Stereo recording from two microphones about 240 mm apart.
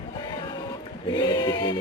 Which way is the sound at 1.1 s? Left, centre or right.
Centre.